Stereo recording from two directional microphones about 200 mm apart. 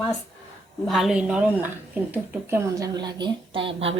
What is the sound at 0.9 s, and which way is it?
A woman's voice, centre (ahead or behind).